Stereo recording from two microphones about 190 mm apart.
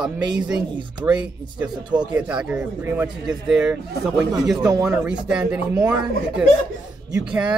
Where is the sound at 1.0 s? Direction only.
5° right (ahead or behind).